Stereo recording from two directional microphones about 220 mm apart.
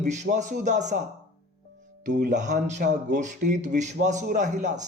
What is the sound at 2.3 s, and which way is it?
A man's voice, 35° right (ahead or behind).